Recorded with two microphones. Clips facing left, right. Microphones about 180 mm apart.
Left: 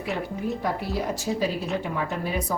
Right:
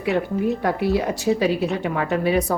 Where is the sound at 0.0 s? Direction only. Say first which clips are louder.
Right 8 dB; centre (ahead or behind).